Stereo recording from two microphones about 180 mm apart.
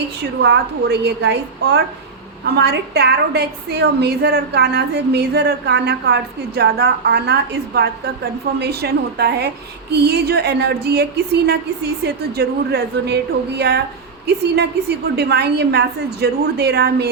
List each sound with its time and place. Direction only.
0.2 s a woman's voice: 70° right (ahead or behind)